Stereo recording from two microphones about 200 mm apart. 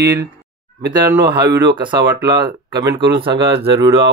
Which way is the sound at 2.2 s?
20° right (ahead or behind).